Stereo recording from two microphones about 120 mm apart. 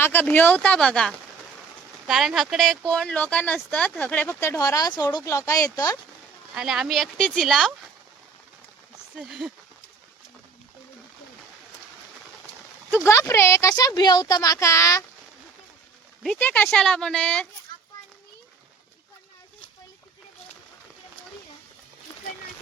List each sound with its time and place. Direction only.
0.0 s speech: 15° left (ahead or behind)
6.5 s speech: 5° right (ahead or behind)
9.2 s speech: centre (ahead or behind)
13.1 s speech: 25° left (ahead or behind)
16.4 s speech: 15° left (ahead or behind)